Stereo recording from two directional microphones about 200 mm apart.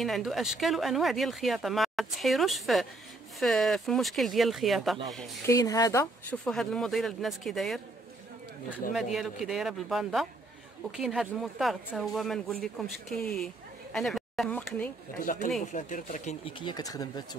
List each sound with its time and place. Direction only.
0.0 s speech: centre (ahead or behind)
5.5 s speech: 15° left (ahead or behind)
6.4 s speech: 5° left (ahead or behind)
9.1 s speech: centre (ahead or behind)
15.2 s speech: 40° left (ahead or behind); by 17.4 s 20° left (ahead or behind)